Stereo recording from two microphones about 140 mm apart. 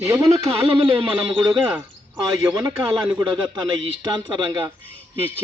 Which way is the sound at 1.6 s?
10° right (ahead or behind).